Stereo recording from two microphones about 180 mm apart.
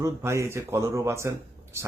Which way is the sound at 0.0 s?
15° right (ahead or behind).